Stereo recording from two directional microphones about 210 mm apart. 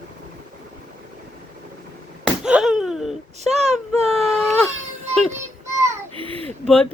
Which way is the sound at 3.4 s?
30° right (ahead or behind).